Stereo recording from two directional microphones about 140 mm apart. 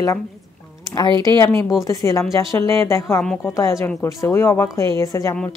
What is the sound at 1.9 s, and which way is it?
A woman's voice, 20° left (ahead or behind).